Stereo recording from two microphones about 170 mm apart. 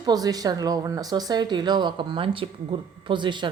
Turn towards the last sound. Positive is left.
turn(degrees=-25)  # may be behind; listen again after turning